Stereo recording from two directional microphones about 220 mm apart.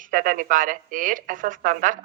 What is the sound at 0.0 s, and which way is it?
Speech, 35° right (ahead or behind).